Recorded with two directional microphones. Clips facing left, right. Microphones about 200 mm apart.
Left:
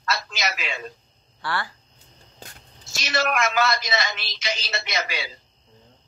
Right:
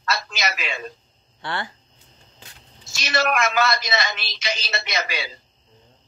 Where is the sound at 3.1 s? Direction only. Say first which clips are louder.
Right 2 dB; 65° right (ahead or behind).